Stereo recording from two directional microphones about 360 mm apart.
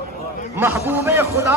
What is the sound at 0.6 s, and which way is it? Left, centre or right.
Speech, centre.